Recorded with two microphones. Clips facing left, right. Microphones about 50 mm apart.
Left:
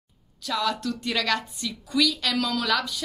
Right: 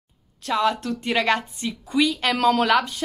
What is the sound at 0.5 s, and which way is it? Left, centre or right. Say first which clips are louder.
A woman's voice: right 5 dB; right.